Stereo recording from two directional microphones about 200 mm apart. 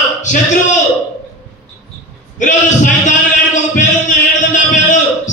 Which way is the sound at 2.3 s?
40° left (ahead or behind).